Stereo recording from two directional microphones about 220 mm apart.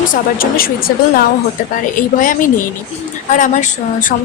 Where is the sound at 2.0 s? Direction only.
35° left (ahead or behind).